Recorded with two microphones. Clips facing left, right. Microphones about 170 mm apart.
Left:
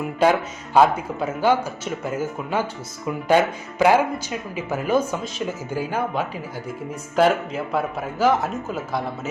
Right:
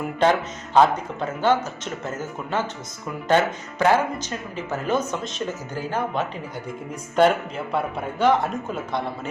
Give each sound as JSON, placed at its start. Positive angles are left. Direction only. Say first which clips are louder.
{"t": 0.2, "sound": "speech", "louder": "left 1 dB", "side_deg": 10}